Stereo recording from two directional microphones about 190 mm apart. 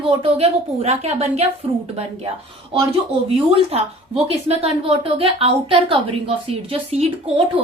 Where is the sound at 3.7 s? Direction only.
30° right (ahead or behind).